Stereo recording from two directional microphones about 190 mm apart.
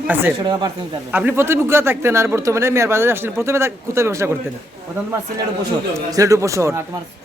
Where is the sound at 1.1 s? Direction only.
10° right (ahead or behind).